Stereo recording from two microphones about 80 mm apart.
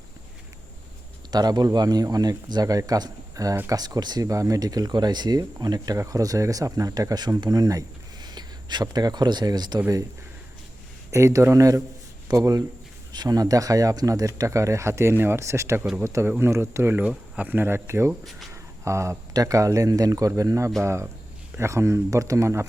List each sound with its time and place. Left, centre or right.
1.3 s speech: right
4.3 s speech: right
11.1 s speech: right
17.0 s speech: centre; by 18.1 s right
18.5 s a sound: right
19.3 s speech: right